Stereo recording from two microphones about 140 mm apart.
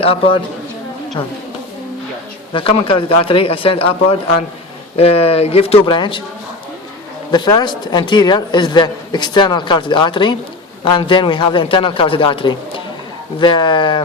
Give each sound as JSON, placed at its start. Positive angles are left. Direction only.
{"t": 0.0, "sound": "speech", "side_deg": 40}
{"t": 2.5, "sound": "a man's voice", "side_deg": 40}
{"t": 7.3, "sound": "a man's voice", "side_deg": 30}